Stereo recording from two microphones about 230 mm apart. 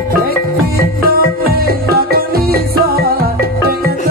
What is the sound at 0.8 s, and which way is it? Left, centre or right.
Music, right.